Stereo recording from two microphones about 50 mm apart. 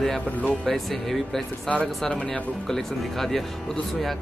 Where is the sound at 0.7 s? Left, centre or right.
Centre.